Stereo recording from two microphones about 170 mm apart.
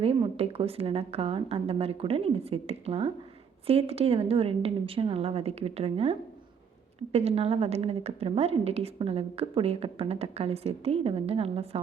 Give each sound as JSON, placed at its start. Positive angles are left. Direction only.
{"t": 0.0, "sound": "a woman's voice", "side_deg": -35}